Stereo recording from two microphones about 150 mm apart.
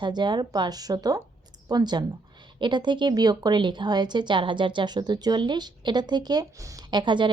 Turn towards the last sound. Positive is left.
turn(degrees=-30)  # may be behind; listen again after turning